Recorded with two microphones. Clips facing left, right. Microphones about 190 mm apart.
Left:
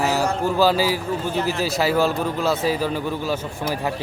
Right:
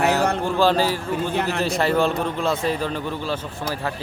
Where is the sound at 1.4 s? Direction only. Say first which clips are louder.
Left 2 dB; 60° right (ahead or behind).